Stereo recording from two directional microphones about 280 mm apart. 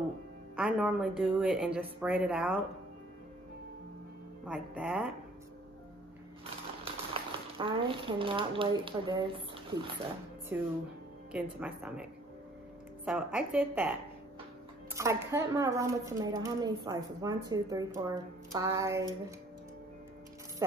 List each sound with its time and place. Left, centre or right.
0.6 s speech: centre
4.5 s speech: centre
6.8 s speech: centre
11.3 s speech: centre
15.0 s a woman's voice: centre